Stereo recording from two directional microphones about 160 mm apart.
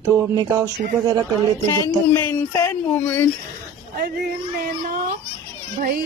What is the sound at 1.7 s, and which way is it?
Speech, 20° left (ahead or behind).